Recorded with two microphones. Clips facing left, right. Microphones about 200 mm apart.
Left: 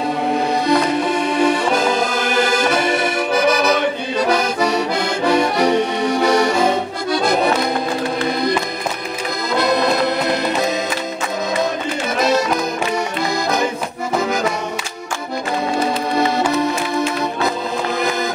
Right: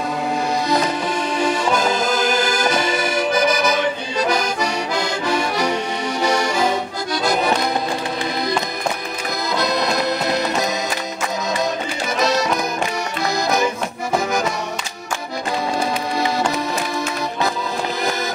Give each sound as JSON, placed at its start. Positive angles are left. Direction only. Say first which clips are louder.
{"t": 1.3, "sound": "accordion", "louder": "left 2 dB", "side_deg": 60}